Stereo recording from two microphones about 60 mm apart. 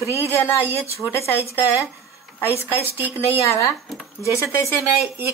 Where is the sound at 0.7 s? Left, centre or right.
Left.